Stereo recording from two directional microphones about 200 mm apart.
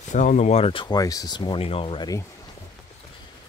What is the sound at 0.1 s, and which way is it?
Speech, 40° left (ahead or behind).